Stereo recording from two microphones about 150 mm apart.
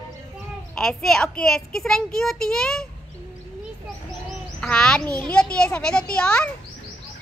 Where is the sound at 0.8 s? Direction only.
5° left (ahead or behind).